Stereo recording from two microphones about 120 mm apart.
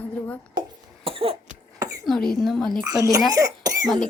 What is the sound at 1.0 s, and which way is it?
Cough, 55° right (ahead or behind).